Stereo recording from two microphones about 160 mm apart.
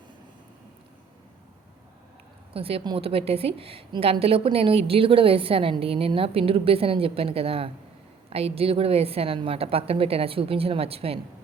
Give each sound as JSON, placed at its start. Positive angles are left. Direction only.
{"t": 2.5, "sound": "a woman's voice", "side_deg": -35}